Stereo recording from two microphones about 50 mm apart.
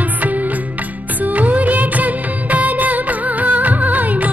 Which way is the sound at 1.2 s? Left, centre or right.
Right.